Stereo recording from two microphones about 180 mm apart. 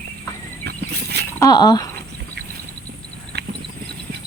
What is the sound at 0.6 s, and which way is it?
Vehicle, 65° right (ahead or behind).